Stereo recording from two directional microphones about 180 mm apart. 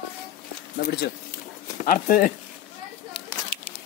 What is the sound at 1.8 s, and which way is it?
Speech, 50° left (ahead or behind).